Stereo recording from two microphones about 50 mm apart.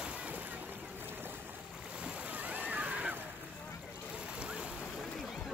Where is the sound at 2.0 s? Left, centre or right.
Right.